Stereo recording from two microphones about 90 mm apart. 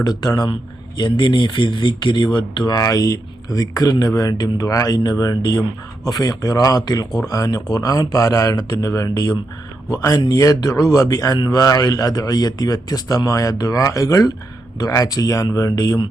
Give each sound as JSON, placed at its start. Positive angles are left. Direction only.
{"t": 0.0, "sound": "speech", "side_deg": 50}
{"t": 2.7, "sound": "a man's voice", "side_deg": 40}
{"t": 5.4, "sound": "speech", "side_deg": 55}
{"t": 6.1, "sound": "a man's voice", "side_deg": 45}
{"t": 11.3, "sound": "speech", "side_deg": 55}
{"t": 11.8, "sound": "a man's voice", "side_deg": 45}